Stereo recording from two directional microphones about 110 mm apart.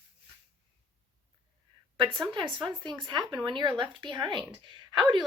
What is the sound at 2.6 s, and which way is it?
Speech, 45° right (ahead or behind).